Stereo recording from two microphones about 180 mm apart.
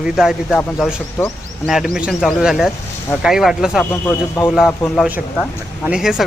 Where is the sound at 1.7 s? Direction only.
Centre (ahead or behind).